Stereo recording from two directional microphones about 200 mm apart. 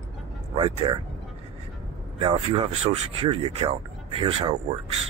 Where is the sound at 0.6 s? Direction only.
30° right (ahead or behind).